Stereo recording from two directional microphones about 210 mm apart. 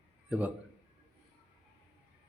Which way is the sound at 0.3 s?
10° right (ahead or behind).